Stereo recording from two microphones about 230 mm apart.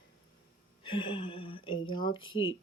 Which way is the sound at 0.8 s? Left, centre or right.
Left.